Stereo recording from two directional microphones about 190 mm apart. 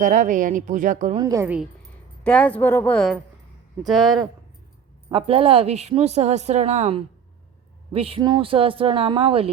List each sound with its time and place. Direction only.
0.0 s speech: 40° right (ahead or behind)
1.1 s a woman's voice: 20° right (ahead or behind)
2.2 s a woman's voice: 5° left (ahead or behind)
5.0 s a woman's voice: 30° right (ahead or behind)